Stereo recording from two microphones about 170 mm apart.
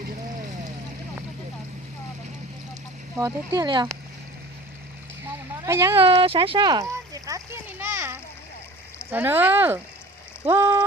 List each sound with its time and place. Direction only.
3.2 s speech: 20° right (ahead or behind)
5.6 s speech: 15° right (ahead or behind)
6.0 s a sound: 30° right (ahead or behind); by 8.2 s 15° right (ahead or behind)
9.0 s speech: 15° right (ahead or behind)